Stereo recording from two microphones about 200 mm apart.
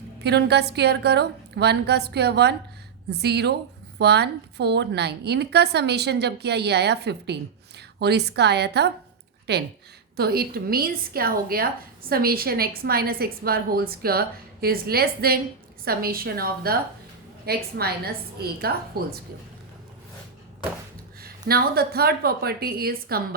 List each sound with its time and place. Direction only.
0.2 s a woman's voice: 55° right (ahead or behind)
21.2 s a woman's voice: 50° right (ahead or behind)